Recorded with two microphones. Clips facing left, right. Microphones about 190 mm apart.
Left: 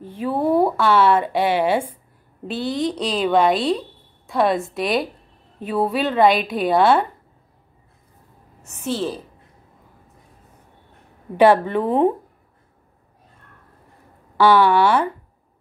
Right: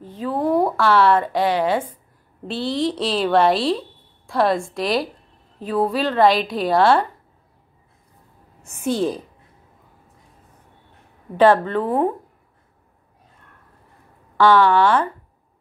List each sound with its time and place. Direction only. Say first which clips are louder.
0.0 s a woman's voice: left 1 dB; 10° left (ahead or behind)
8.6 s a woman's voice: right 3 dB; 10° right (ahead or behind)
11.3 s speech: left 1 dB; 10° left (ahead or behind)
14.3 s speech: even; 10° left (ahead or behind)